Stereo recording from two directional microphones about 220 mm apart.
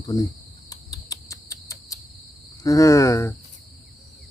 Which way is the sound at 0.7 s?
15° left (ahead or behind).